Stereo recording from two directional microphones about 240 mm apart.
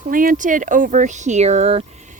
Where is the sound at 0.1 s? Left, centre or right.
Right.